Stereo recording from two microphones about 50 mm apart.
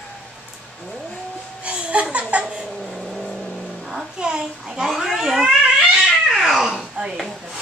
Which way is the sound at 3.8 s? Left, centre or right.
Centre.